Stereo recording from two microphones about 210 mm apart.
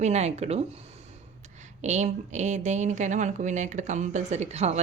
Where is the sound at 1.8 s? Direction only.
35° right (ahead or behind).